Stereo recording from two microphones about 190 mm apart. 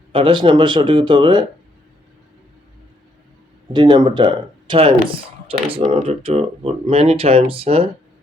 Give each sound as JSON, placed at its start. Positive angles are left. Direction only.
{"t": 0.1, "sound": "speech", "side_deg": -25}
{"t": 3.7, "sound": "speech", "side_deg": -20}